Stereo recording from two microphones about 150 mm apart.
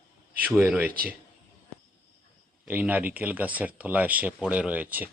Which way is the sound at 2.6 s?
10° right (ahead or behind).